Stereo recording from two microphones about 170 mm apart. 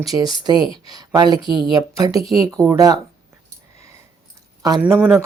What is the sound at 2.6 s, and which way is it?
Speech, 5° left (ahead or behind).